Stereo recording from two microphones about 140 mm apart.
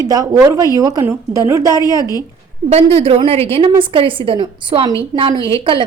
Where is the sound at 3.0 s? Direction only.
45° right (ahead or behind).